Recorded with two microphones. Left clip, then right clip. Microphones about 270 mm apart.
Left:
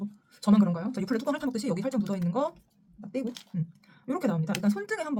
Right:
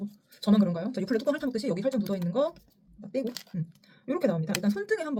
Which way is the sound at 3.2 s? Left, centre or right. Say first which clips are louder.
Right 2 dB; right.